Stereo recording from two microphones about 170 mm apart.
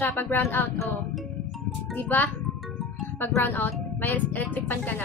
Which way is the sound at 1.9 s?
10° left (ahead or behind).